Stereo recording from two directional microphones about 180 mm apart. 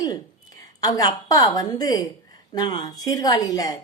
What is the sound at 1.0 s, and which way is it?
Speech, 20° left (ahead or behind).